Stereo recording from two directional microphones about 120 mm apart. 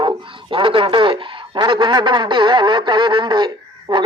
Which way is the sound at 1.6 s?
40° right (ahead or behind).